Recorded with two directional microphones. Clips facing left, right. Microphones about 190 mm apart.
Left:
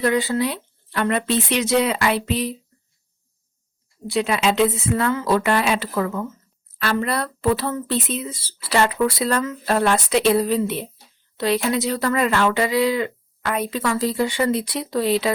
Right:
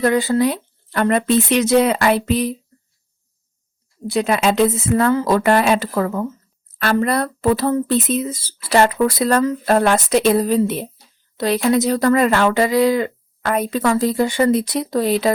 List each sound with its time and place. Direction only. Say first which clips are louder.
0.0 s speech: right 4 dB; 45° right (ahead or behind)
4.0 s speech: right 3 dB; 45° right (ahead or behind)